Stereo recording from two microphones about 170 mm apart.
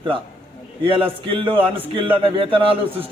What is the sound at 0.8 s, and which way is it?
A man's voice, 30° right (ahead or behind).